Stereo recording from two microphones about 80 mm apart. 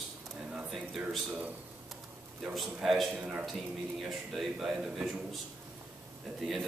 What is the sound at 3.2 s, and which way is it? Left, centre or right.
Speech, centre.